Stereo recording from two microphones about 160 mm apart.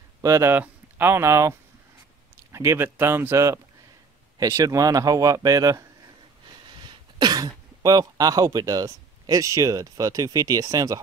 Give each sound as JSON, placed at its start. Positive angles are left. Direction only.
{"t": 0.2, "sound": "a man's voice", "side_deg": -15}